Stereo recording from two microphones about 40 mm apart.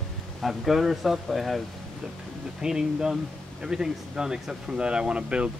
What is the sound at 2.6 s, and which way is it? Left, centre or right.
Speech, centre.